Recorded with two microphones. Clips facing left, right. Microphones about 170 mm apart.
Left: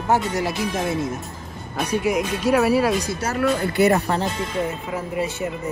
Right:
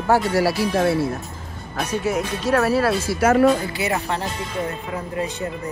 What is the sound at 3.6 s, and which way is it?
Speech, 60° left (ahead or behind).